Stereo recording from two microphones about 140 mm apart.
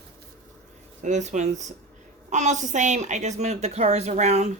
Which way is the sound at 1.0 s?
60° right (ahead or behind).